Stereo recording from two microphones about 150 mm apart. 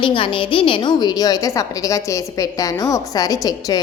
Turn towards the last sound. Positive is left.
turn(degrees=25)  # may be behind; listen again after turning